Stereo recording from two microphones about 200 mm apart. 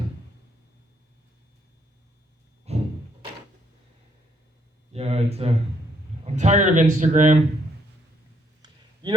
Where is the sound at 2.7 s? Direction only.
30° right (ahead or behind).